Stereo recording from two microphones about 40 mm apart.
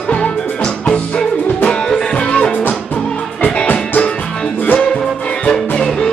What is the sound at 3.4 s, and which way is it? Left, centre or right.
Music, left.